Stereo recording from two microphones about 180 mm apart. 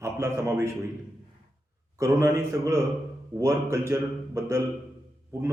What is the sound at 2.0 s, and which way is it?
A man's voice, 15° right (ahead or behind).